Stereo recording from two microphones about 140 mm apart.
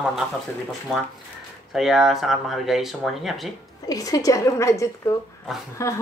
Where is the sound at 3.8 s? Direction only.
25° left (ahead or behind).